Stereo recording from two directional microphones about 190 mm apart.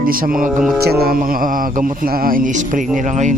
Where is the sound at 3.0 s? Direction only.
40° right (ahead or behind).